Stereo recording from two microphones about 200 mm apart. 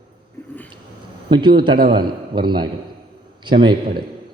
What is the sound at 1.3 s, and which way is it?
A man's voice, 25° right (ahead or behind).